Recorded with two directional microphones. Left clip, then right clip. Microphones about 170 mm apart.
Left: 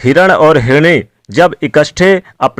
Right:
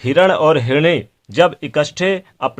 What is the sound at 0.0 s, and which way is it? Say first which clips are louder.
Speech: left 6 dB; 35° left (ahead or behind).